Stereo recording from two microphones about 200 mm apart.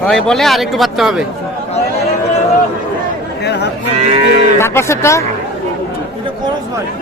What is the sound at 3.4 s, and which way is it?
Chatter, 55° left (ahead or behind).